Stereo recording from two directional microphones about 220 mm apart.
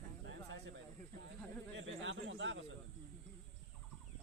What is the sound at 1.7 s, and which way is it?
Speech, 55° right (ahead or behind).